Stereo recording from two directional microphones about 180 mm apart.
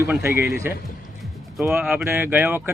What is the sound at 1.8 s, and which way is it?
Speech, 10° right (ahead or behind).